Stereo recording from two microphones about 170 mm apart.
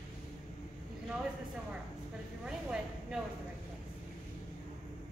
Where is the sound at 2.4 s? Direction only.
5° right (ahead or behind).